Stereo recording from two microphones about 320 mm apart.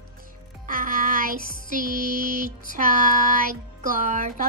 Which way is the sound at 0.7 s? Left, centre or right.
Right.